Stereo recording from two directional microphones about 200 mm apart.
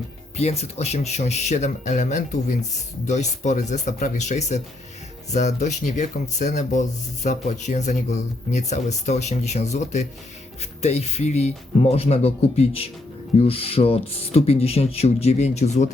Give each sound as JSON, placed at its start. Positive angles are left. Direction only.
{"t": 0.3, "sound": "speech", "side_deg": 30}